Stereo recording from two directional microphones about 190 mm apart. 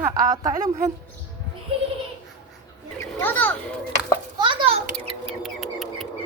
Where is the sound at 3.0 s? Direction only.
10° left (ahead or behind).